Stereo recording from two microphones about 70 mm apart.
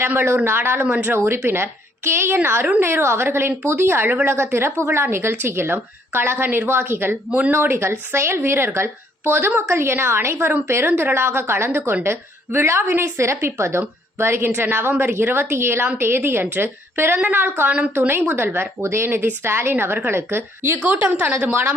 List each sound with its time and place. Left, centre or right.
0.0 s a woman's voice: right